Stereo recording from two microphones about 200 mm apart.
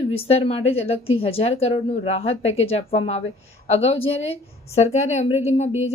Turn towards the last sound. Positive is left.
turn(degrees=35)  # may be behind; listen again after turning